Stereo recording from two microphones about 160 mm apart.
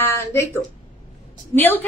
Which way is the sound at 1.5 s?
10° left (ahead or behind).